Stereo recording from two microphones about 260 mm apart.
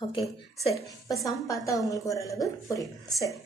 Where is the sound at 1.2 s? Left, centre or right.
Centre.